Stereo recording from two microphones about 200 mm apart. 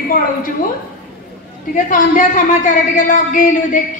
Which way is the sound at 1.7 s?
40° left (ahead or behind).